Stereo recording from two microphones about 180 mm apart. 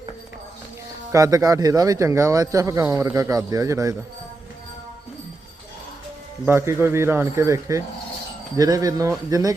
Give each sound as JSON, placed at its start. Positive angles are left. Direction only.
{"t": 1.1, "sound": "speech", "side_deg": -20}
{"t": 6.4, "sound": "speech", "side_deg": -15}